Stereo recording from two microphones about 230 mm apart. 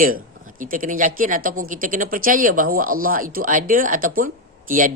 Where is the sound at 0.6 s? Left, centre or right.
Right.